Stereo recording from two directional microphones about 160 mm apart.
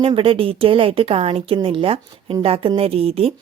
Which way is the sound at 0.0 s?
35° right (ahead or behind).